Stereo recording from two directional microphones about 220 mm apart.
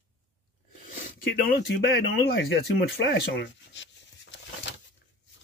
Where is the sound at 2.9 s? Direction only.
55° left (ahead or behind).